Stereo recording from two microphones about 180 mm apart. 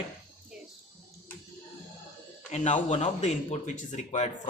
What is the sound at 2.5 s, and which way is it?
Speech, 40° left (ahead or behind).